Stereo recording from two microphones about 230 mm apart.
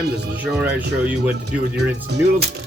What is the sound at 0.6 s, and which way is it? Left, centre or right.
Speech, centre.